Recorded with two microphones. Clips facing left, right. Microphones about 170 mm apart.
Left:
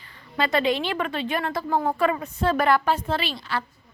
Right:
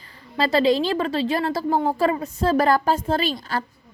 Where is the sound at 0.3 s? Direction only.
35° right (ahead or behind).